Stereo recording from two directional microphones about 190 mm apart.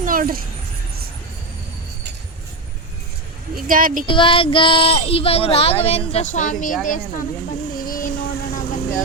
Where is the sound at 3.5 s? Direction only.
45° right (ahead or behind).